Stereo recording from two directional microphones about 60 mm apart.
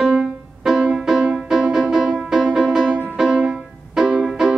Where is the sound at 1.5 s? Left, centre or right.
Centre.